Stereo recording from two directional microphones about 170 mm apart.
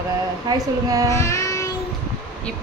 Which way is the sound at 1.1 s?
15° left (ahead or behind).